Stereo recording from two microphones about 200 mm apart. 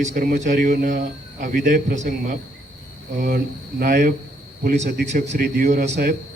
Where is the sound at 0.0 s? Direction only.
40° right (ahead or behind).